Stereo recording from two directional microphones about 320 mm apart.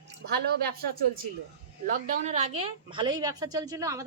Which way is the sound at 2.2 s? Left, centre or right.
Centre.